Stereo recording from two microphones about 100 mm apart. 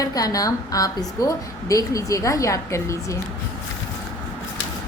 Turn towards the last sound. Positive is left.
turn(degrees=30)  # may be behind; listen again after turning